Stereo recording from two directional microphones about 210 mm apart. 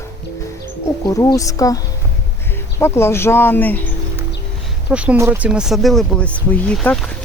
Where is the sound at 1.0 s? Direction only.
15° left (ahead or behind).